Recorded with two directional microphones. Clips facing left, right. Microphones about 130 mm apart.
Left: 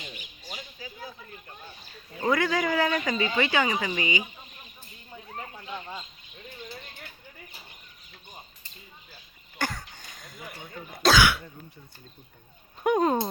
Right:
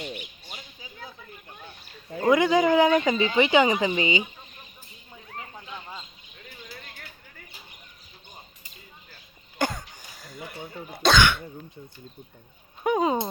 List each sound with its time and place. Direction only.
0.0 s bird: 65° right (ahead or behind)
2.2 s speech: 20° right (ahead or behind)
9.6 s cough: 20° right (ahead or behind)
10.1 s a sound: centre (ahead or behind)
10.9 s speech: centre (ahead or behind)
12.8 s a sound: centre (ahead or behind)